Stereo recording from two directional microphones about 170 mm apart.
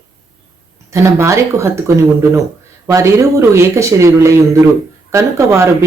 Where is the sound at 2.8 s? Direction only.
20° right (ahead or behind).